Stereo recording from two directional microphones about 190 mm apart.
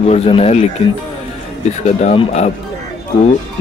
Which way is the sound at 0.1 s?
30° left (ahead or behind).